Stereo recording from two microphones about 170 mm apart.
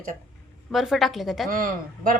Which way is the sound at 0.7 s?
Centre (ahead or behind).